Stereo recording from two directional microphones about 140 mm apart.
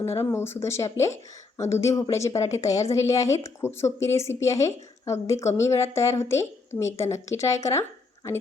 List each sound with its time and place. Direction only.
0.0 s speech: 20° left (ahead or behind)